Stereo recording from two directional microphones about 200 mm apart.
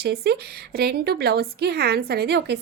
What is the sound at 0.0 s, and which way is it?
A woman's voice, 55° right (ahead or behind).